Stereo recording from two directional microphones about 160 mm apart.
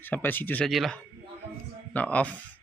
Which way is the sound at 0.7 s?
Centre (ahead or behind).